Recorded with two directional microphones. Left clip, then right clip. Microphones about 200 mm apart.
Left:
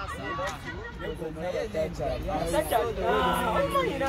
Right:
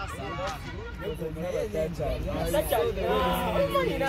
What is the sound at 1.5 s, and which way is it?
Speech, 55° right (ahead or behind).